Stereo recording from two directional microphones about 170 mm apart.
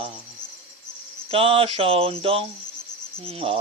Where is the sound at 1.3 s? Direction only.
35° right (ahead or behind).